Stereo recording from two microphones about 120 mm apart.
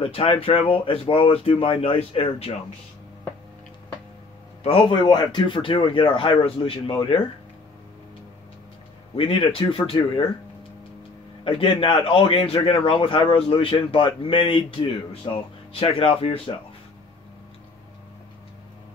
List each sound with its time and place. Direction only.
0.0 s speech: 50° left (ahead or behind)
4.6 s speech: 45° left (ahead or behind)
9.1 s speech: 45° left (ahead or behind)
11.4 s speech: 45° left (ahead or behind)